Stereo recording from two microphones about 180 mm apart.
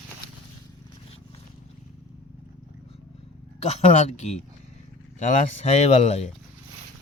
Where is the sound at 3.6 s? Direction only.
35° left (ahead or behind).